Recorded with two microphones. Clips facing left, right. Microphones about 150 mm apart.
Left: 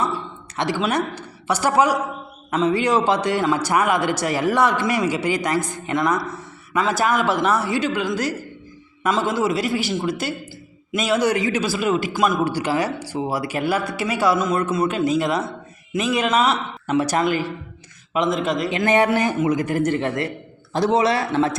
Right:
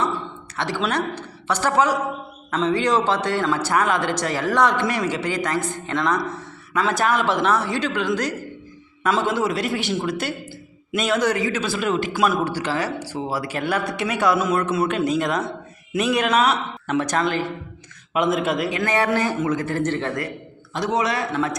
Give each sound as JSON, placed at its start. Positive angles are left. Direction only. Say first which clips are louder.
{"t": 0.5, "sound": "a woman's voice", "louder": "left 2 dB", "side_deg": 15}
{"t": 11.3, "sound": "speech", "louder": "left 2 dB", "side_deg": 20}
{"t": 11.6, "sound": "speech", "louder": "left 2 dB", "side_deg": 5}
{"t": 12.1, "sound": "speech", "louder": "even", "side_deg": -5}
{"t": 12.5, "sound": "speech", "louder": "left 3 dB", "side_deg": 15}
{"t": 18.1, "sound": "speech", "louder": "even", "side_deg": -5}
{"t": 18.8, "sound": "a man's voice", "louder": "left 6 dB", "side_deg": 15}
{"t": 20.7, "sound": "a man's voice", "louder": "left 4 dB", "side_deg": 30}